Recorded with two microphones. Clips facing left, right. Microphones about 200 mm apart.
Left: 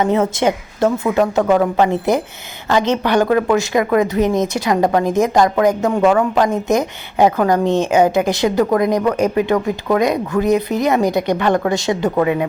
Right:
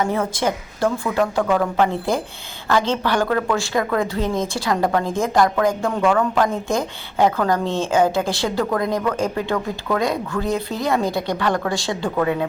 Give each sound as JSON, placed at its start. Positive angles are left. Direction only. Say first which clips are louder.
{"t": 0.0, "sound": "a woman's voice", "louder": "left 5 dB", "side_deg": 25}